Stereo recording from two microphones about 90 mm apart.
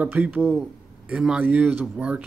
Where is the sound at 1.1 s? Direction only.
10° right (ahead or behind).